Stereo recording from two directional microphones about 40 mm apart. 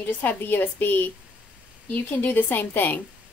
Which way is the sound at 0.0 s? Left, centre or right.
Left.